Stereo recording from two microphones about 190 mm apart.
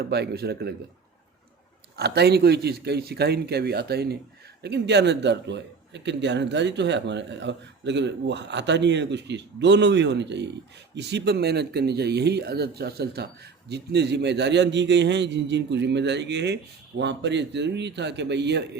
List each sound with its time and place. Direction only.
0.0 s speech: 60° right (ahead or behind)
2.0 s a man's voice: 60° right (ahead or behind)